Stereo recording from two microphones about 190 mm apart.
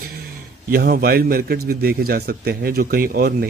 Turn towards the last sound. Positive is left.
turn(degrees=-55)  # may be behind; listen again after turning